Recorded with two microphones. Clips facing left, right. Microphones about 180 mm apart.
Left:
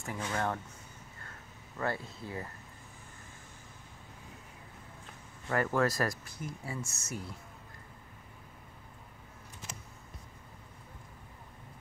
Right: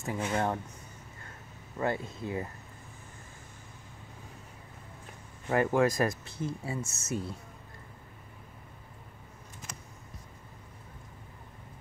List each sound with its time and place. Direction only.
0.0 s speech: 20° right (ahead or behind)
1.8 s speech: 20° right (ahead or behind)
5.5 s speech: 20° right (ahead or behind)